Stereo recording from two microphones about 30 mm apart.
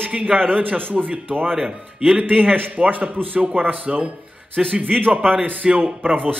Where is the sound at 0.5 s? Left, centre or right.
Right.